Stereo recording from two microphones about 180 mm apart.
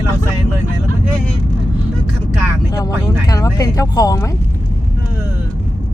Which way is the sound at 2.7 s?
20° left (ahead or behind).